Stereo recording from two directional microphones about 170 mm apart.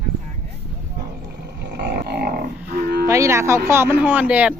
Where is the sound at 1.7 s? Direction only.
80° right.